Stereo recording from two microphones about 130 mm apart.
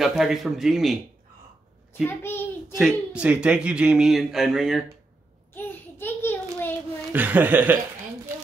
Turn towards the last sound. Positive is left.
turn(degrees=-15)  # may be behind; listen again after turning